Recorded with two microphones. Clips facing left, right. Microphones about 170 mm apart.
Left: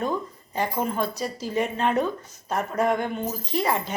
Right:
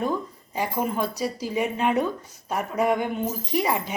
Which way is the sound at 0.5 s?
10° right (ahead or behind).